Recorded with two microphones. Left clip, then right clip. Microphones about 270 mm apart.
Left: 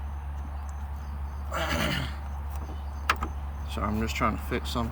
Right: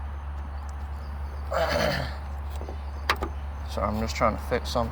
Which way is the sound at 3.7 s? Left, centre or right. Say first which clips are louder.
Right 3 dB; left.